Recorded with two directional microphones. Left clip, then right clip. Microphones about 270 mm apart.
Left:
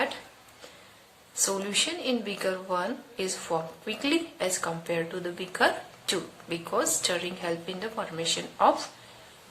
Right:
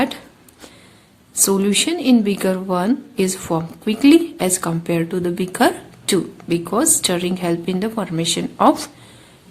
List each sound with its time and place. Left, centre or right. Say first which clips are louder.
1.5 s a woman's voice: right 10 dB; right